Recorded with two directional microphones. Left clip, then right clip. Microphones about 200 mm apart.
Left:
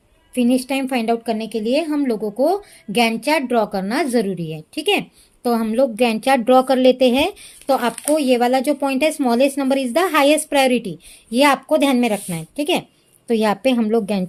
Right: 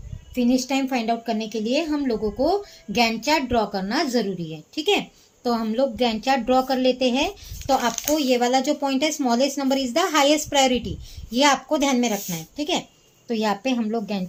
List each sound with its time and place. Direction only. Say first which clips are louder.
0.3 s a woman's voice: left 3 dB; 45° left (ahead or behind)